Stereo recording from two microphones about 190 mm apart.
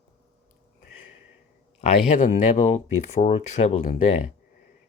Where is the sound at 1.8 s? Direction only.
35° left (ahead or behind).